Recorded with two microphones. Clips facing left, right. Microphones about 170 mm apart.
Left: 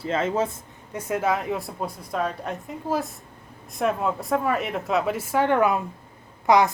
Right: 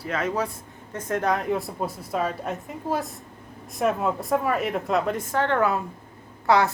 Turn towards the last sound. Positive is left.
turn(degrees=15)  # may be behind; listen again after turning